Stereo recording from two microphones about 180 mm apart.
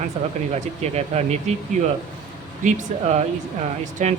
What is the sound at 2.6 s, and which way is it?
Speech, 40° right (ahead or behind).